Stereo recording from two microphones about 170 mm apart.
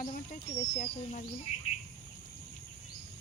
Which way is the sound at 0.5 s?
40° left (ahead or behind).